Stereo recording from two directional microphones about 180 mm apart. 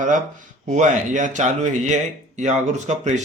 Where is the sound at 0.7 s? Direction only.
45° right (ahead or behind).